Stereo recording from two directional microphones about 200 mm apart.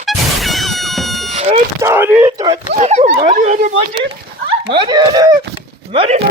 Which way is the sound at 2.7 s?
35° right (ahead or behind).